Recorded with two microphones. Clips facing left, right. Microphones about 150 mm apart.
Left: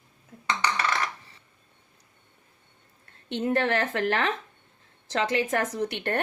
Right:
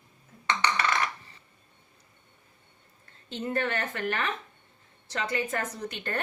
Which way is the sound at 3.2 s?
75° left (ahead or behind).